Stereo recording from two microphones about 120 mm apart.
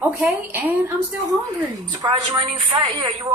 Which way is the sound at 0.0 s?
15° right (ahead or behind).